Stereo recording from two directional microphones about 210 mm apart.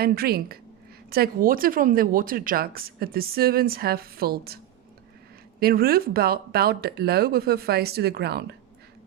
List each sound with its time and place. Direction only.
0.0 s a woman's voice: 45° right (ahead or behind)